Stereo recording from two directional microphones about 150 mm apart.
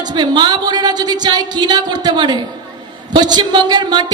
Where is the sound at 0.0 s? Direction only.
30° right (ahead or behind).